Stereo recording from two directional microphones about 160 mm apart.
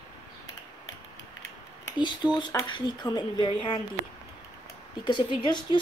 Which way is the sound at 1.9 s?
30° left (ahead or behind).